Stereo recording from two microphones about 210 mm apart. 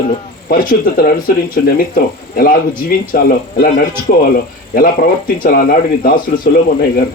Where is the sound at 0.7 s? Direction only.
45° left (ahead or behind).